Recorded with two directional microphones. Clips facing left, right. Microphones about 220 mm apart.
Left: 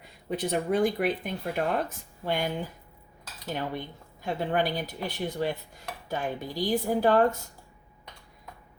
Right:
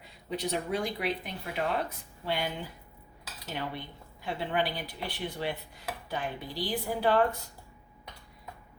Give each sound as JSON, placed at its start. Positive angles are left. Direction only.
{"t": 0.3, "sound": "a woman's voice", "side_deg": 50}
{"t": 3.5, "sound": "a woman's voice", "side_deg": 45}